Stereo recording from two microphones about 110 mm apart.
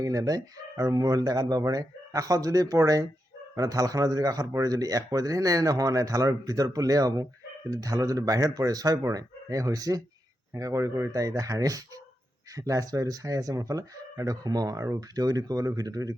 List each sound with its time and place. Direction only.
0.0 s speech: 30° right (ahead or behind)